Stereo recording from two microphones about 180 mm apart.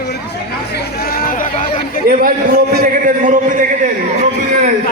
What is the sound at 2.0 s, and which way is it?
A man's voice, 55° right (ahead or behind).